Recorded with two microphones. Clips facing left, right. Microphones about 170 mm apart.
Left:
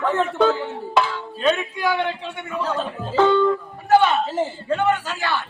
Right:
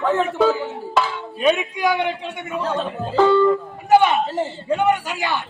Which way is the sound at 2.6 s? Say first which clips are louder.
Right 3 dB; centre (ahead or behind).